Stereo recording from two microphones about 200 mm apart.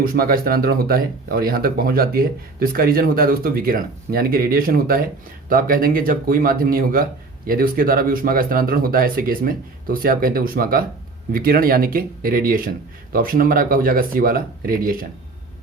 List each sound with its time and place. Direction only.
0.0 s speech: 45° right (ahead or behind)